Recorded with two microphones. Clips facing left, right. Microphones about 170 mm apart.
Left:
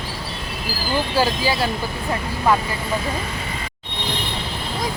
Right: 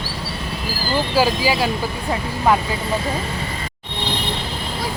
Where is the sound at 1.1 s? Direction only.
10° right (ahead or behind).